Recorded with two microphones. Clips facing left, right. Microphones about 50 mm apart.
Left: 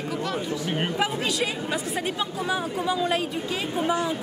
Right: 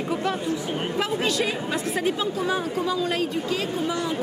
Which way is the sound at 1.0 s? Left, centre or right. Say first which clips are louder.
Right 4 dB; centre.